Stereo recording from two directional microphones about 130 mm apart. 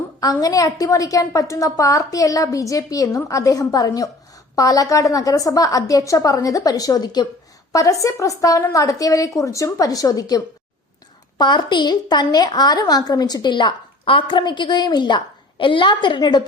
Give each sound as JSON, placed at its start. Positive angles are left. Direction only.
{"t": 0.2, "sound": "a woman's voice", "side_deg": 30}